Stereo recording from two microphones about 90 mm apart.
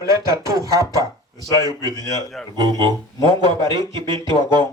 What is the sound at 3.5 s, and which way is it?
Speech, 55° right (ahead or behind).